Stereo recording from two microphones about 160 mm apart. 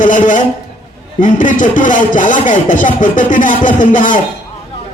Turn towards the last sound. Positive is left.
turn(degrees=55)  # may be behind; listen again after turning